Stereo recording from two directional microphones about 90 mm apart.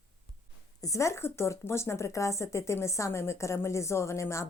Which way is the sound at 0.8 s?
35° left (ahead or behind).